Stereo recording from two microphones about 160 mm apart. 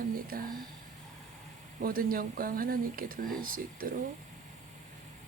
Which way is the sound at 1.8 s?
65° right (ahead or behind).